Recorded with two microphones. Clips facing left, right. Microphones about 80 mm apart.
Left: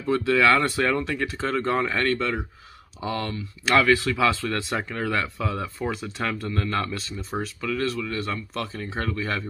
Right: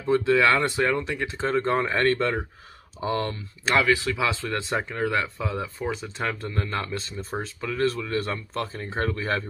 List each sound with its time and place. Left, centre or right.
0.0 s speech: right
3.7 s speech: centre; by 9.4 s right